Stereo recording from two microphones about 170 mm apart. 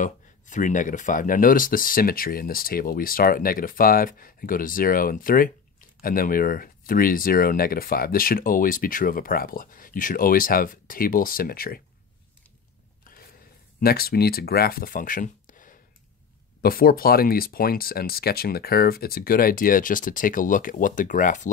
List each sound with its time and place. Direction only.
0.0 s speech: 45° left (ahead or behind)
13.7 s speech: 65° left (ahead or behind)